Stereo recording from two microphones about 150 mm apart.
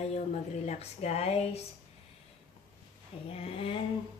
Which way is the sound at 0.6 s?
45° left (ahead or behind).